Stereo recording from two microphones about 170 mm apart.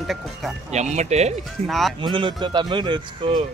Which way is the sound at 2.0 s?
30° right (ahead or behind).